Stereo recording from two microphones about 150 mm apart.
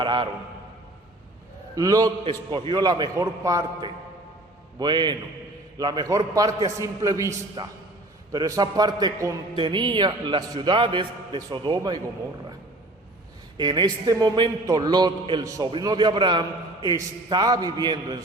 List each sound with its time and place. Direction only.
0.0 s a man's voice: 30° right (ahead or behind)
1.7 s a man's voice: 25° right (ahead or behind)
13.6 s a man's voice: 30° right (ahead or behind)